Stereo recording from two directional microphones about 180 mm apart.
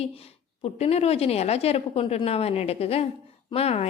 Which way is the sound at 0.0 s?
35° left (ahead or behind).